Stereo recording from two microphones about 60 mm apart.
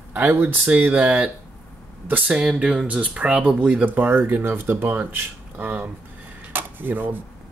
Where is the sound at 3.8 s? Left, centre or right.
Right.